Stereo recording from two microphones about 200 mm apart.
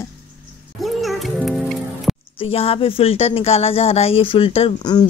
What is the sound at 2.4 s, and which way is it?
Speech, 30° left (ahead or behind).